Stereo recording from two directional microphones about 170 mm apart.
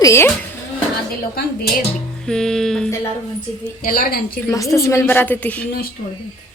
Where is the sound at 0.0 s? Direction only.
15° left (ahead or behind).